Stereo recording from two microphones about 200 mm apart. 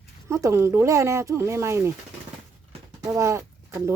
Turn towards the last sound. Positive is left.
turn(degrees=-15)  # may be behind; listen again after turning